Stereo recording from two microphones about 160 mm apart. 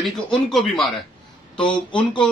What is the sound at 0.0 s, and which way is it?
Speech, centre (ahead or behind).